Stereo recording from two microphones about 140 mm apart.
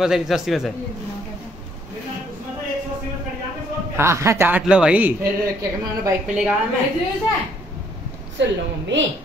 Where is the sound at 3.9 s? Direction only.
20° right (ahead or behind).